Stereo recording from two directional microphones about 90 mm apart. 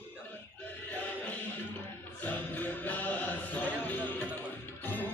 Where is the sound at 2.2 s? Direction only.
20° left (ahead or behind).